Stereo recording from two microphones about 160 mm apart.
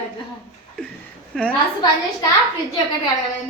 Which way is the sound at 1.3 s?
5° left (ahead or behind).